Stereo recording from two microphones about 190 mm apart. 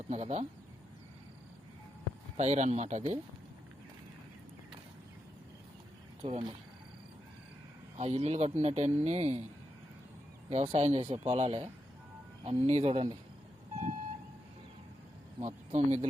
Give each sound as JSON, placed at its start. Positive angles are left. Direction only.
{"t": 0.1, "sound": "speech", "side_deg": -35}
{"t": 2.4, "sound": "speech", "side_deg": -35}
{"t": 6.2, "sound": "speech", "side_deg": -30}
{"t": 7.9, "sound": "speech", "side_deg": -35}
{"t": 10.5, "sound": "speech", "side_deg": -35}
{"t": 15.4, "sound": "speech", "side_deg": -35}